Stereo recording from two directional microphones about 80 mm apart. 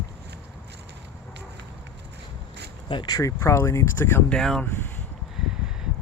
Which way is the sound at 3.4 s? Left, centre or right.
Left.